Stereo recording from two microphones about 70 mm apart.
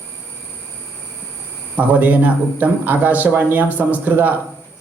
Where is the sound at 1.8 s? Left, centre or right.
Right.